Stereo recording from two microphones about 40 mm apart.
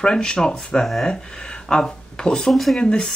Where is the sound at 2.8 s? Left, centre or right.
Left.